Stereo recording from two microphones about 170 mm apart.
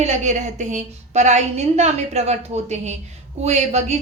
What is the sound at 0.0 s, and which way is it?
A woman's voice, 40° right (ahead or behind).